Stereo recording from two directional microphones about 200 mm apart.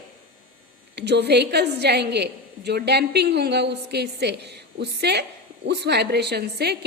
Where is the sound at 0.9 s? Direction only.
55° right (ahead or behind).